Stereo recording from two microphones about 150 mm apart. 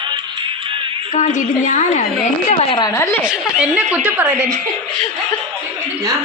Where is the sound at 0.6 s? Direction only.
35° right (ahead or behind).